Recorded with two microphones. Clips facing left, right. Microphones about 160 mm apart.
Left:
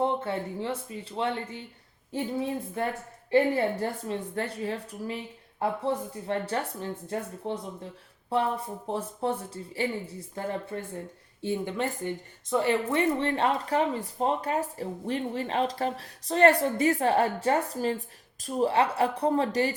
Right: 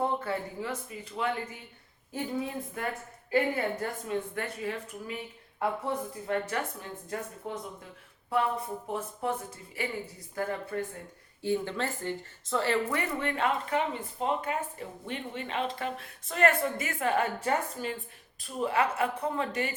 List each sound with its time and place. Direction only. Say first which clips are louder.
0.0 s a woman's voice: left 3 dB; 25° left (ahead or behind)
8.9 s a woman's voice: left 4 dB; 30° left (ahead or behind)
11.4 s a woman's voice: left 1 dB; 15° left (ahead or behind); by 19.7 s 35° left (ahead or behind)